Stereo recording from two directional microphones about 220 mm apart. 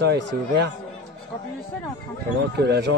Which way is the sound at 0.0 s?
50° right (ahead or behind).